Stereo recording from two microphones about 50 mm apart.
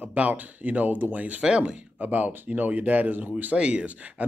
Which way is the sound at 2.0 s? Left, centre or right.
Right.